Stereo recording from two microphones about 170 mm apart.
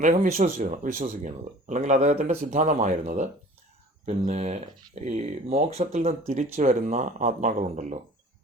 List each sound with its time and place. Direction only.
0.0 s speech: 45° right (ahead or behind)